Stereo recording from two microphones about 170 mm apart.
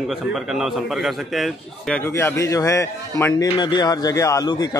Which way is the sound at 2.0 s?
15° left (ahead or behind).